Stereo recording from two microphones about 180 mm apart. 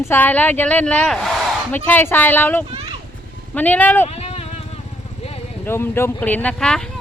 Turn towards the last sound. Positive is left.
turn(degrees=5)  # may be behind; listen again after turning